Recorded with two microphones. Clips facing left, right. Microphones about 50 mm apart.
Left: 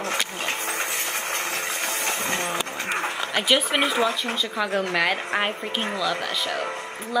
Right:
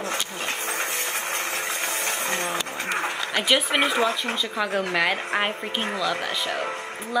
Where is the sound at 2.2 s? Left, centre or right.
Centre.